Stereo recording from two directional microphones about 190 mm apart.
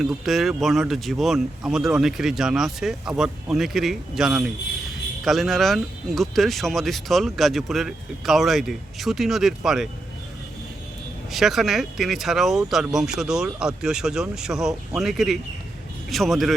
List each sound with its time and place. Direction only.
0.0 s speech: centre (ahead or behind)
11.3 s speech: centre (ahead or behind)